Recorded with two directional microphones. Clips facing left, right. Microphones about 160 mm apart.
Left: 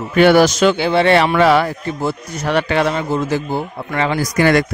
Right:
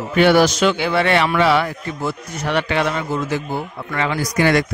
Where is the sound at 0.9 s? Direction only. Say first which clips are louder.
Left 4 dB; 30° left (ahead or behind).